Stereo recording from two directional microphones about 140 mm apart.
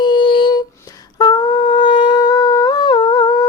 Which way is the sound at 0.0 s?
35° left (ahead or behind).